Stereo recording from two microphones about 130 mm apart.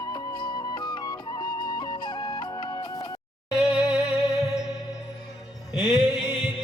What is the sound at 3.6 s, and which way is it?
Music, 5° right (ahead or behind).